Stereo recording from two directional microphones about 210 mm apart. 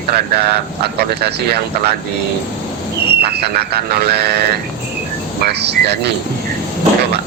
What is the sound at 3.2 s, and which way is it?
Speech, 50° right (ahead or behind).